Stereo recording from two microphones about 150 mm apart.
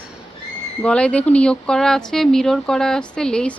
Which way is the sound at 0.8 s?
5° left (ahead or behind).